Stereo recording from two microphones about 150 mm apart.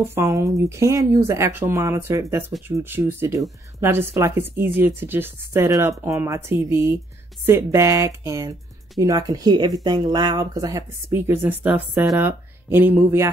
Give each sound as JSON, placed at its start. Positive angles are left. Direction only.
{"t": 0.0, "sound": "speech", "side_deg": -20}